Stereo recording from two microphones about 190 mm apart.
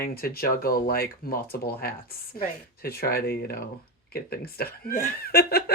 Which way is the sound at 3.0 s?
55° left (ahead or behind).